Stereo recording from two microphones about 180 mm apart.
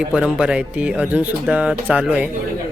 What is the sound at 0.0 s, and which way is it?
Speech, 5° right (ahead or behind).